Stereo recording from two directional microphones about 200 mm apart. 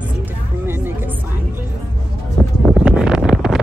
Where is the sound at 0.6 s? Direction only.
10° right (ahead or behind).